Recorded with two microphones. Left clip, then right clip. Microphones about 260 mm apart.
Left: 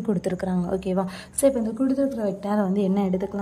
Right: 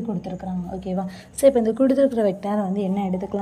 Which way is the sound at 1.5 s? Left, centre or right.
Centre.